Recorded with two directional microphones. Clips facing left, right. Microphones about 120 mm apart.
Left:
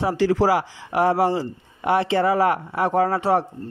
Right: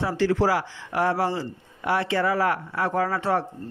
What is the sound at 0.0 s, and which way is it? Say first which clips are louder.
Speech: left 3 dB; 15° left (ahead or behind).